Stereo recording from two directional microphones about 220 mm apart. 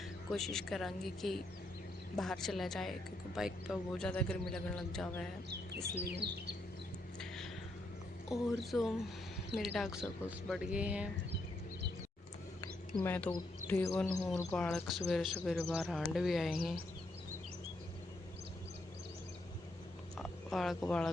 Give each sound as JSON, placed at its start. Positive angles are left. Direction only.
{"t": 0.3, "sound": "speech", "side_deg": 0}
{"t": 6.1, "sound": "speech", "side_deg": -50}
{"t": 7.2, "sound": "a sound", "side_deg": 0}
{"t": 8.3, "sound": "speech", "side_deg": 0}
{"t": 9.6, "sound": "speech", "side_deg": 0}
{"t": 13.0, "sound": "speech", "side_deg": 10}
{"t": 20.1, "sound": "a sound", "side_deg": 0}
{"t": 20.8, "sound": "speech", "side_deg": 5}